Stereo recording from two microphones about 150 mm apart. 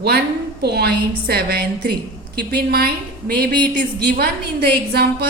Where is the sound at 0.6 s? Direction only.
90° right.